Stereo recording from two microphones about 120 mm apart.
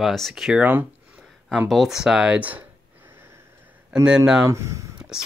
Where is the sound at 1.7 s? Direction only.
Centre (ahead or behind).